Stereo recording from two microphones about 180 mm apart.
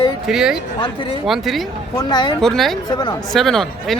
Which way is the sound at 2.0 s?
25° left (ahead or behind).